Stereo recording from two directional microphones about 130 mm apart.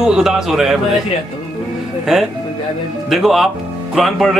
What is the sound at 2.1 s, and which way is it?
Speech, 5° right (ahead or behind).